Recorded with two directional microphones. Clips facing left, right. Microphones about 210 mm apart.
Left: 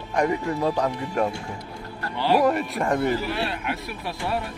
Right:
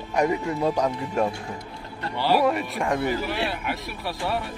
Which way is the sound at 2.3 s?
Centre (ahead or behind).